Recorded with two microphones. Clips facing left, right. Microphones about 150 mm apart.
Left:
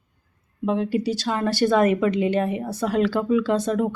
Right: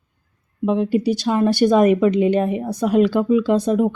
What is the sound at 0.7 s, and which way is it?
Speech, 15° right (ahead or behind).